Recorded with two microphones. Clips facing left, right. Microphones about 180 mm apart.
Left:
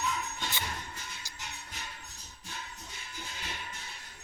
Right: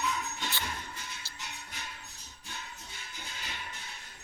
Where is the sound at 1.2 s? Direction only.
15° left (ahead or behind).